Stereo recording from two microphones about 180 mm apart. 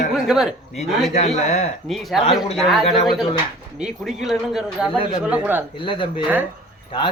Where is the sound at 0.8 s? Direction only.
35° left (ahead or behind).